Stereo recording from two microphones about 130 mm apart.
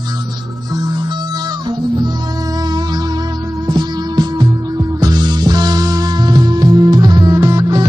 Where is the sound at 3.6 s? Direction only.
30° right (ahead or behind).